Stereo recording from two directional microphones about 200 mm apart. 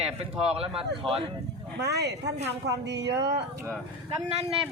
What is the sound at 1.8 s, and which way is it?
Speech, 55° right (ahead or behind).